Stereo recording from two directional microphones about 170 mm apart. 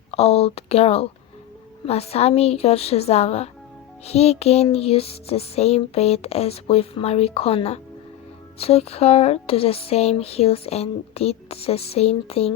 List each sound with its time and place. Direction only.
0.1 s speech: 35° left (ahead or behind)